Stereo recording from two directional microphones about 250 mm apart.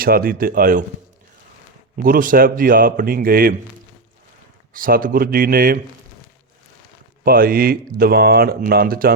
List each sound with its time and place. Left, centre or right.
0.0 s speech: right
2.0 s speech: right
4.7 s speech: right
7.3 s speech: right